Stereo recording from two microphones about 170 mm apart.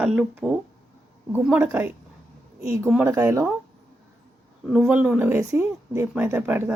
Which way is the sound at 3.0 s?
20° right (ahead or behind).